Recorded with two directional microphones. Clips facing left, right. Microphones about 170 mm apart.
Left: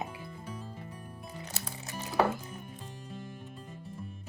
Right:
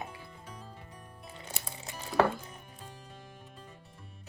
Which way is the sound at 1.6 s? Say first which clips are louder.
Left 2 dB; 20° right (ahead or behind).